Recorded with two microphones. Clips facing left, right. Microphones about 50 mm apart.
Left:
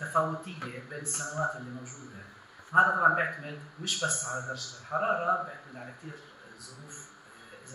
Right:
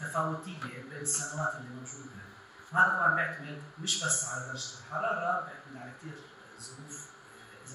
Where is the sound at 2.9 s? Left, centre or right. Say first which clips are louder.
Left 3 dB; centre.